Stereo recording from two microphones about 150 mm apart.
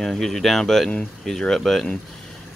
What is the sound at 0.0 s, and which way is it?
Speech, centre (ahead or behind).